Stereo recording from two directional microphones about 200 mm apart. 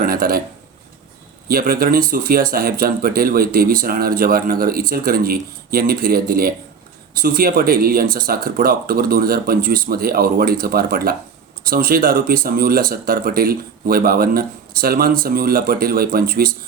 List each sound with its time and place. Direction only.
0.0 s speech: 45° right (ahead or behind)
1.5 s speech: 45° right (ahead or behind)